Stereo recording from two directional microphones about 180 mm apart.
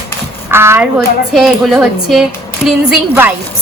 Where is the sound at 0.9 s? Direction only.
Centre (ahead or behind).